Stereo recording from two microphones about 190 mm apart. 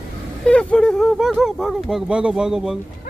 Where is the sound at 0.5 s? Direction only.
5° left (ahead or behind).